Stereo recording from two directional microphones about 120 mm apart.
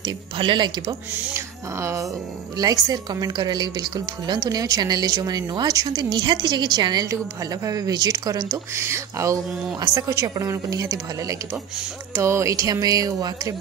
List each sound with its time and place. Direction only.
0.0 s a woman's voice: 40° right (ahead or behind)
1.3 s a woman's voice: 25° right (ahead or behind)
8.7 s a woman's voice: 25° right (ahead or behind)